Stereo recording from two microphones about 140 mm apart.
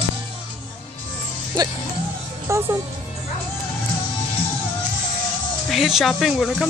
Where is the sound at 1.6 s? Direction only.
30° right (ahead or behind).